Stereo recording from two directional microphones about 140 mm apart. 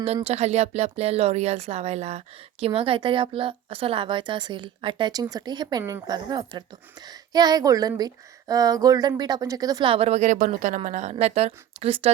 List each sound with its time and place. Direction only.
0.3 s speech: 50° right (ahead or behind); by 9.9 s 25° right (ahead or behind)
9.9 s speech: 45° right (ahead or behind)